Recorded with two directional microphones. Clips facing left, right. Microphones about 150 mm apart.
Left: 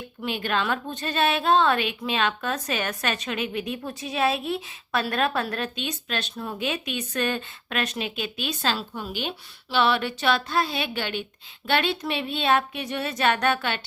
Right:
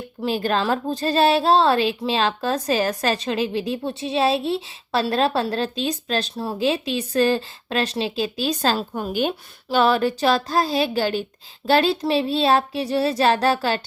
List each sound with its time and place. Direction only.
0.2 s a woman's voice: 35° right (ahead or behind)